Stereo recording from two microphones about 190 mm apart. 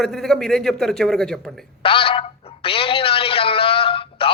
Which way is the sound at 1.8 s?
30° left (ahead or behind).